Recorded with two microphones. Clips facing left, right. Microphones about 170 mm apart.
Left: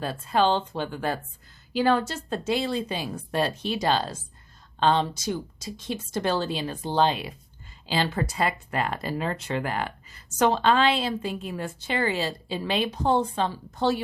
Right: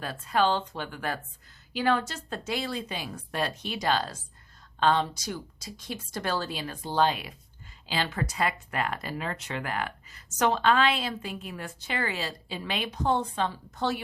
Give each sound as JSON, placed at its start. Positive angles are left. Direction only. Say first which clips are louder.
{"t": 0.0, "sound": "speech", "louder": "left 3 dB", "side_deg": 30}